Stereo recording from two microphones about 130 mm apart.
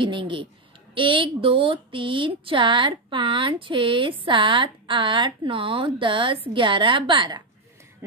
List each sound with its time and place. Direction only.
0.0 s speech: 40° right (ahead or behind)